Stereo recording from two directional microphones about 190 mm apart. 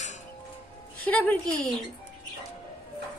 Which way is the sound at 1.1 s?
5° left (ahead or behind).